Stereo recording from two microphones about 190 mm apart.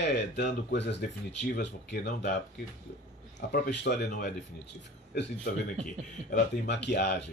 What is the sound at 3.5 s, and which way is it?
Speech, 65° left (ahead or behind).